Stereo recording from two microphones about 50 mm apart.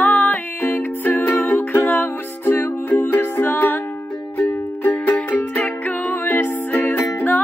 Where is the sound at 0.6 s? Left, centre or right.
Left.